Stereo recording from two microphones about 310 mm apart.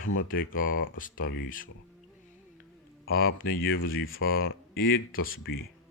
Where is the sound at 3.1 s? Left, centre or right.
Left.